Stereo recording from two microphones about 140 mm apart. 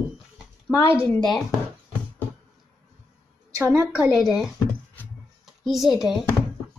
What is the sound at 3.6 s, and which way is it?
Speech, 15° right (ahead or behind).